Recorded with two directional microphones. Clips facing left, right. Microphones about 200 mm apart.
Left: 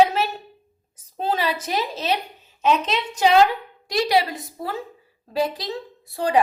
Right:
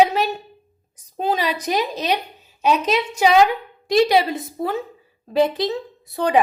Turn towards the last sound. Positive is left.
turn(degrees=-20)  # may be behind; listen again after turning